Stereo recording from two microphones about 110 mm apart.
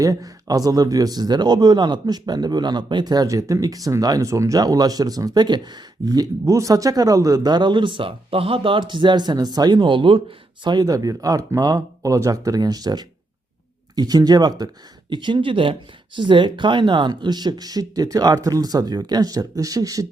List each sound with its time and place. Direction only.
0.0 s speech: 30° right (ahead or behind)